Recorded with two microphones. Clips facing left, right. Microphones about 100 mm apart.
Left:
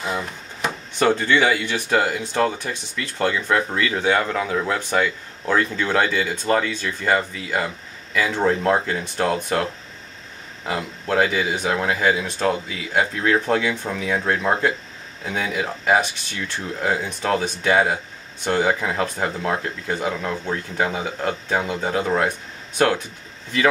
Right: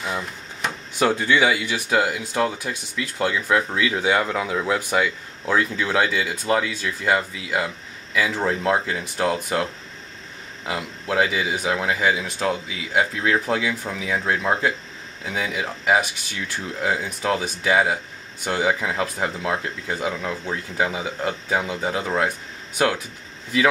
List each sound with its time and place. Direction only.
0.0 s drawer open or close: 5° left (ahead or behind)
0.9 s speech: 10° right (ahead or behind)